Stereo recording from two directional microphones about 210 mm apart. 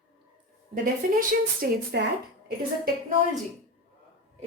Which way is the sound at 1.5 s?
50° right (ahead or behind).